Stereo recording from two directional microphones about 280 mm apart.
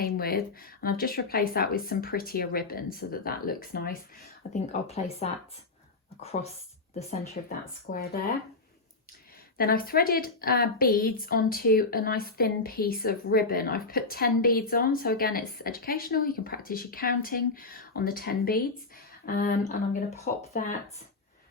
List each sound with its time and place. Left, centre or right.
0.0 s a woman's voice: left
7.4 s a woman's voice: left
9.6 s a woman's voice: left